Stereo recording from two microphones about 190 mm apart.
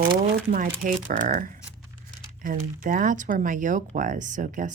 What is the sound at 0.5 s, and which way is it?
Speech, 45° right (ahead or behind).